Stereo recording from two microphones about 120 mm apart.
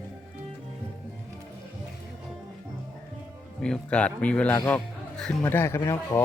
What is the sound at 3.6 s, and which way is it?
Speech, 10° left (ahead or behind).